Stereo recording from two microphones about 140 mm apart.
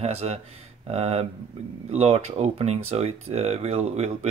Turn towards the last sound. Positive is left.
turn(degrees=-50)  # may be behind; listen again after turning